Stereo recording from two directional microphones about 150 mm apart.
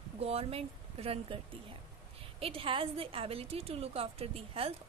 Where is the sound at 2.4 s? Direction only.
40° right (ahead or behind).